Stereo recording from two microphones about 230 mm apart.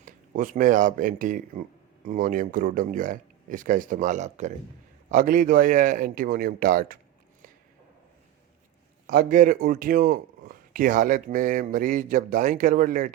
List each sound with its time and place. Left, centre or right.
0.0 s a man's voice: right
9.0 s a man's voice: right